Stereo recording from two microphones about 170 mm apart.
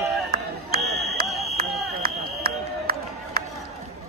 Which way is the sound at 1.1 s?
60° right (ahead or behind).